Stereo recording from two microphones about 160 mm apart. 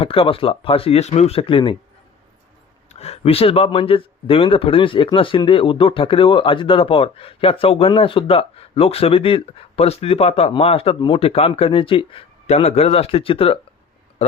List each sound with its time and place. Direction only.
0.0 s speech: 35° left (ahead or behind)
2.9 s speech: 40° left (ahead or behind)
14.2 s a sound: 45° left (ahead or behind)